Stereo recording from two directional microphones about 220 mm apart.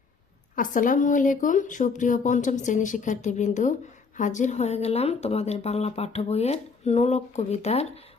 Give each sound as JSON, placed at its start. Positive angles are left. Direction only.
{"t": 0.5, "sound": "speech", "side_deg": 35}